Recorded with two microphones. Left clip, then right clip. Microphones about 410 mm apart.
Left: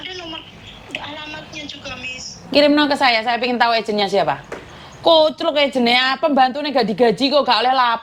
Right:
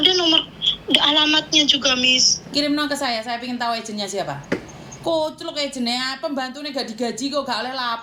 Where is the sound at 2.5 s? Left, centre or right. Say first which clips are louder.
Left 8 dB; left.